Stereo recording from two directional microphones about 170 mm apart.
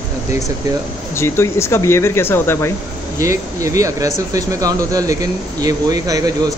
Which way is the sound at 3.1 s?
20° right (ahead or behind).